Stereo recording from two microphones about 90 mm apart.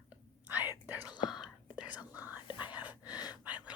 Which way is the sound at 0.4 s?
20° right (ahead or behind).